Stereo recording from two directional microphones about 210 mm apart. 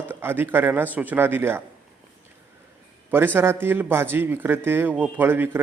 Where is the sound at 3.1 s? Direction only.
10° right (ahead or behind).